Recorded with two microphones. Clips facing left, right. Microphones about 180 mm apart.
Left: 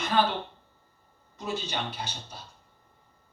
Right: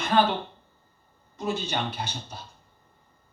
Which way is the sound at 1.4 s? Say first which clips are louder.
Right 4 dB; 50° right (ahead or behind).